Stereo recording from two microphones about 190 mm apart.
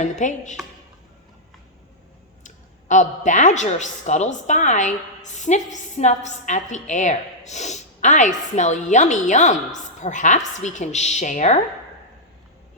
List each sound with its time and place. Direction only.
0.0 s speech: 40° left (ahead or behind)
2.4 s speech: 40° left (ahead or behind)